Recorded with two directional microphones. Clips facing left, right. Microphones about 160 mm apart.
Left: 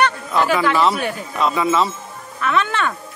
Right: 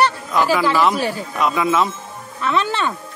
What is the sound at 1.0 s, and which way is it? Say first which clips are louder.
Speech: right 2 dB; 30° right (ahead or behind).